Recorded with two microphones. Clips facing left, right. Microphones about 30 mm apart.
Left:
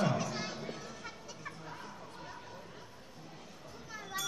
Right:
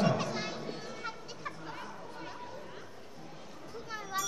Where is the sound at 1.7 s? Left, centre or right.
Right.